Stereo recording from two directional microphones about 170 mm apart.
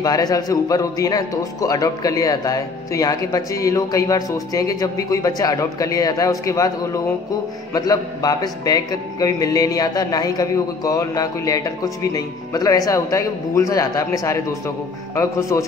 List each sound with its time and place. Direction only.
0.0 s a man's voice: 20° left (ahead or behind)